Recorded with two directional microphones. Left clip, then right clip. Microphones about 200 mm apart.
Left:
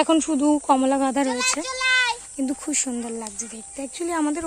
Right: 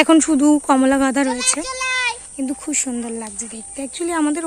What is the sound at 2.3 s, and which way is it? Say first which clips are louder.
Speech: right 2 dB; 25° left (ahead or behind).